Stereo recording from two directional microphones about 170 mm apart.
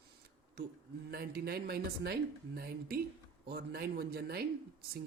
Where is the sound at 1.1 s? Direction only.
65° right (ahead or behind).